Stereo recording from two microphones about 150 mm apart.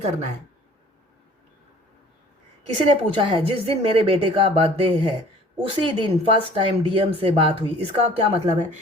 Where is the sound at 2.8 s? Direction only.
35° right (ahead or behind).